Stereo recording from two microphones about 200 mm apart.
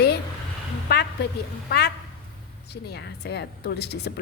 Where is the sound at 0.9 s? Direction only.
55° left (ahead or behind).